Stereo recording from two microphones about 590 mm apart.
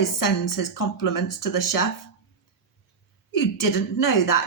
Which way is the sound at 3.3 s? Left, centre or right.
Left.